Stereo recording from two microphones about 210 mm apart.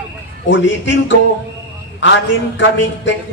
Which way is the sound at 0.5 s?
60° left (ahead or behind).